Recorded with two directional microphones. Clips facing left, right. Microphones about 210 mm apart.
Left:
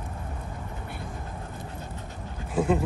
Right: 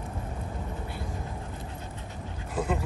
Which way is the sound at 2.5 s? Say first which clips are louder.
Left 6 dB; 15° left (ahead or behind).